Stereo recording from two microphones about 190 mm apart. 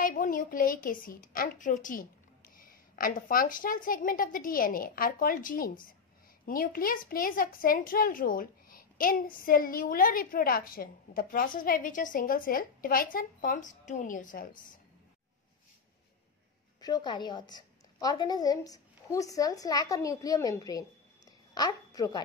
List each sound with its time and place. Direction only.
0.0 s a woman's voice: 45° left (ahead or behind)
16.8 s a woman's voice: 20° left (ahead or behind)